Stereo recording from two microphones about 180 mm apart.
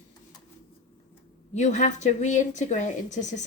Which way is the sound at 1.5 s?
40° left (ahead or behind).